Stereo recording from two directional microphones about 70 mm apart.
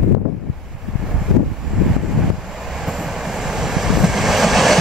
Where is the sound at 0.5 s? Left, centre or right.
Centre.